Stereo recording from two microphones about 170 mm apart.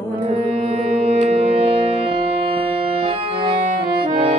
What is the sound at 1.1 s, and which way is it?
Music, 40° right (ahead or behind).